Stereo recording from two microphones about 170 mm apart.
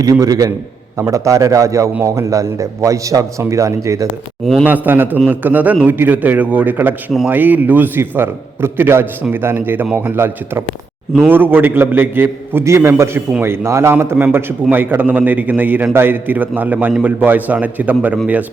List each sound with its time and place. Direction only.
0.0 s a man's voice: 20° right (ahead or behind)